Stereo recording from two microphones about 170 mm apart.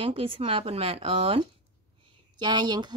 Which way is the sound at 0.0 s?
30° right (ahead or behind).